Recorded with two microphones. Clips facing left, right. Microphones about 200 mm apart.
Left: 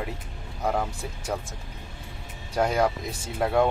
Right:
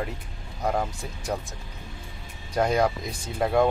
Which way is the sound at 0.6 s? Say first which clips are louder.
Even; 10° right (ahead or behind).